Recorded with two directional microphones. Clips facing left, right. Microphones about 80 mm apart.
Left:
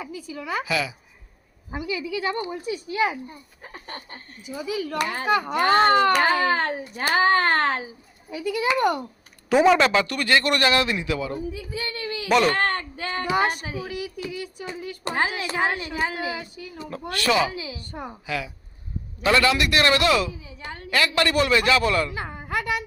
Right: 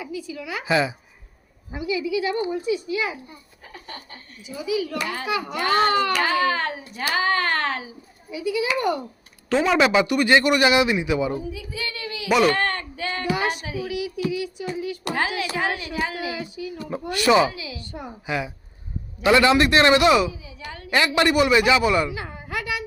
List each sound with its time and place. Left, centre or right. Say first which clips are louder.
0.0 s a woman's voice: right 2 dB; left
0.6 s a man's voice: right 8 dB; right
1.7 s a woman's voice: right 4 dB; left
9.6 s a man's voice: right 2 dB; centre
11.5 s speech: left 1 dB; left
12.5 s a sound: right 1 dB; left
13.3 s a woman's voice: left 5 dB; left
16.9 s a man's voice: right 5 dB; centre
17.5 s a woman's voice: left 1 dB; left
18.3 s a man's voice: right 5 dB; right
20.4 s a woman's voice: even; left
20.9 s a man's voice: right 2 dB; right
22.1 s a sound: left 2 dB; left